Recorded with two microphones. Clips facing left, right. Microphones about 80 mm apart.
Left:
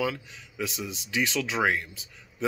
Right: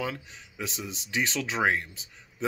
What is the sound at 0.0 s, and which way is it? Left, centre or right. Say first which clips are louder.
Speech: left 4 dB; right.